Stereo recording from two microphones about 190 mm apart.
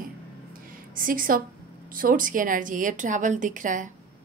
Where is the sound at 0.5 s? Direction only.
45° right (ahead or behind).